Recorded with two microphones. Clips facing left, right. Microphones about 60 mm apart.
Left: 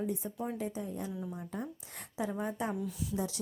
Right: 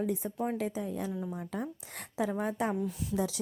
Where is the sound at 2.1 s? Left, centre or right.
Right.